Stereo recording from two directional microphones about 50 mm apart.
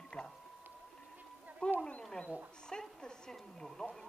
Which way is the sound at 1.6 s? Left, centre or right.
Left.